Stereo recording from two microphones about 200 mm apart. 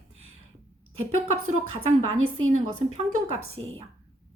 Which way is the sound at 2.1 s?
90° right.